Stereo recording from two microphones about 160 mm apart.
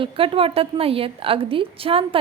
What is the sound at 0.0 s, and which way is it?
Speech, 35° right (ahead or behind).